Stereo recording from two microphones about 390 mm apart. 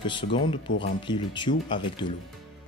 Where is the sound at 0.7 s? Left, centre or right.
Left.